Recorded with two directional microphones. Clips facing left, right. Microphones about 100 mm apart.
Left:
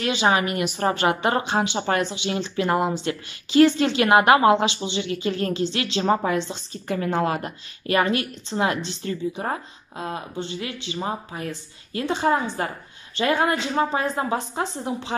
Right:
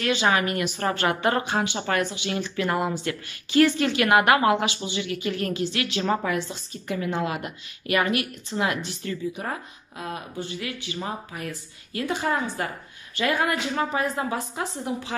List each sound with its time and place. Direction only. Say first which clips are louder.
0.0 s a woman's voice: left 2 dB; 20° left (ahead or behind)
6.9 s a woman's voice: left 4 dB; 40° left (ahead or behind)